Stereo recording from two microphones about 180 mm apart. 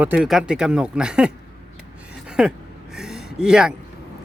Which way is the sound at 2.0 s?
5° right (ahead or behind).